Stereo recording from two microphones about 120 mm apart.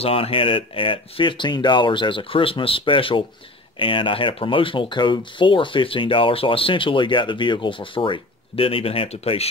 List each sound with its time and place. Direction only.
0.0 s speech: 50° left (ahead or behind)